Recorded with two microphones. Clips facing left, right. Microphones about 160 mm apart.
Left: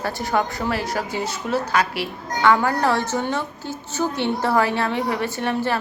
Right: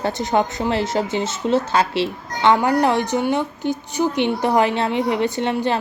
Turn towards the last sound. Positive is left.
turn(degrees=-20)  # may be behind; listen again after turning